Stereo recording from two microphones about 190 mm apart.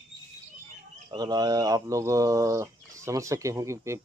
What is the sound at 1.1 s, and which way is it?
Speech, 20° right (ahead or behind).